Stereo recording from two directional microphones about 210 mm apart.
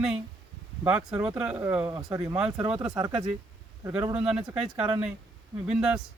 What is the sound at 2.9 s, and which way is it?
Speech, 20° right (ahead or behind).